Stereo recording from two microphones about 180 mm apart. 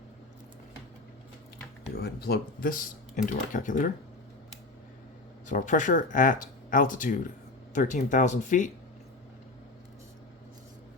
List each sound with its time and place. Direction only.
2.0 s speech: 60° left (ahead or behind)
3.2 s speech: 45° left (ahead or behind)
5.5 s speech: 45° left (ahead or behind)